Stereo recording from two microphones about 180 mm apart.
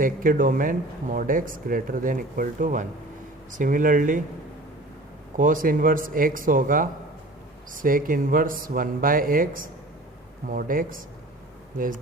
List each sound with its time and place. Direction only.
0.0 s speech: 50° right (ahead or behind)
5.4 s speech: 50° right (ahead or behind)